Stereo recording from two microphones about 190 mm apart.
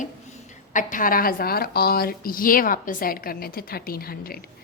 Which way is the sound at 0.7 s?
45° left (ahead or behind).